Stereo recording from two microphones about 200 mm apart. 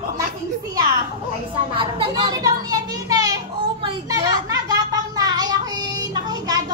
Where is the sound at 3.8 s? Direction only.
25° right (ahead or behind).